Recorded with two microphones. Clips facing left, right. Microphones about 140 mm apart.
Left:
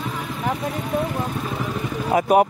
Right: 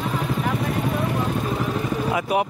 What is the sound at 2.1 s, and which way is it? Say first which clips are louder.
Speech: left 8 dB; 45° left (ahead or behind).